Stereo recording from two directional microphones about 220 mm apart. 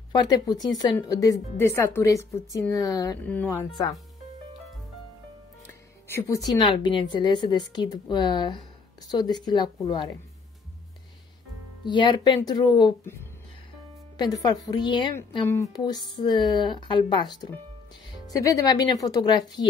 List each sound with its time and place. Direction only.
0.1 s a woman's voice: 20° left (ahead or behind)
5.6 s music: 10° left (ahead or behind)
6.3 s speech: 20° left (ahead or behind)
11.8 s a woman's voice: 20° left (ahead or behind)